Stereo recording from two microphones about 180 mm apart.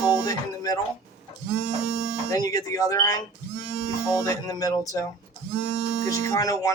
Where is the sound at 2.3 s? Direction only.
20° left (ahead or behind).